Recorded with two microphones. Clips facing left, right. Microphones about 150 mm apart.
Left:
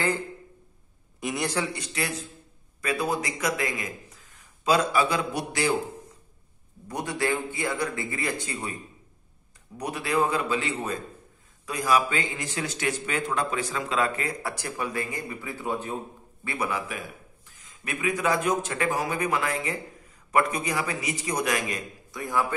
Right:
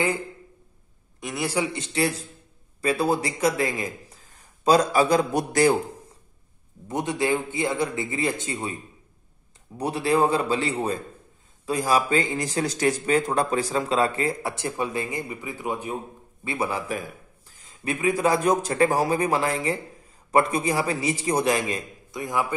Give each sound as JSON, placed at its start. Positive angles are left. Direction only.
{"t": 1.2, "sound": "a man's voice", "side_deg": 0}
{"t": 1.7, "sound": "a man's voice", "side_deg": -30}
{"t": 6.9, "sound": "a man's voice", "side_deg": -20}
{"t": 9.8, "sound": "a man's voice", "side_deg": -30}
{"t": 16.4, "sound": "a man's voice", "side_deg": -25}